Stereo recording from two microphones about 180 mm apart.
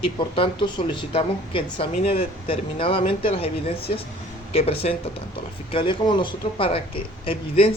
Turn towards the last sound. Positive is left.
turn(degrees=30)  # may be behind; listen again after turning